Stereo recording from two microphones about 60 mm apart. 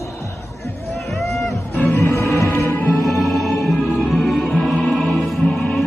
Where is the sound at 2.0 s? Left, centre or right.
Left.